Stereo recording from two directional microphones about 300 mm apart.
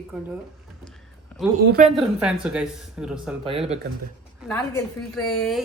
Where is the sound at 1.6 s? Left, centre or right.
Right.